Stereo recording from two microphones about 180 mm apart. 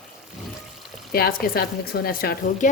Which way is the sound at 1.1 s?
55° left (ahead or behind).